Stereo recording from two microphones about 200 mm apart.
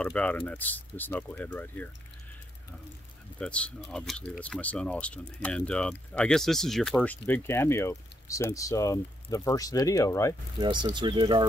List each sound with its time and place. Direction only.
0.0 s speech: 5° left (ahead or behind)
3.3 s speech: 5° left (ahead or behind)
10.6 s speech: 20° right (ahead or behind)